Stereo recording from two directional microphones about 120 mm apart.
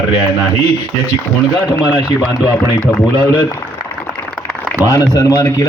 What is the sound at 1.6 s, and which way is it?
Speech, 30° left (ahead or behind).